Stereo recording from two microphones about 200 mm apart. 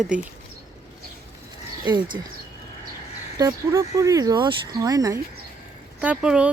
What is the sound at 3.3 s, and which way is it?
Speech, 15° right (ahead or behind).